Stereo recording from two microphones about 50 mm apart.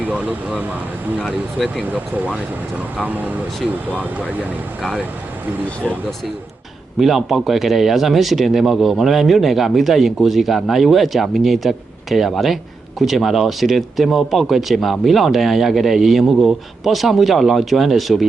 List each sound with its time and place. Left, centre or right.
0.1 s speech: right
1.9 s speech: right
3.9 s speech: right
7.0 s speech: centre